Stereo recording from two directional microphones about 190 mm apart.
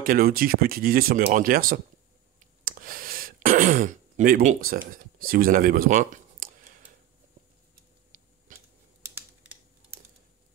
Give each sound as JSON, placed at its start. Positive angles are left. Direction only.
{"t": 0.0, "sound": "speech", "side_deg": -50}
{"t": 8.1, "sound": "a sound", "side_deg": -40}
{"t": 8.5, "sound": "scissors", "side_deg": -45}
{"t": 9.0, "sound": "scissors", "side_deg": -10}